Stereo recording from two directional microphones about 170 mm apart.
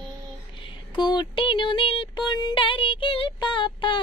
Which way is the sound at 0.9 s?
25° left (ahead or behind).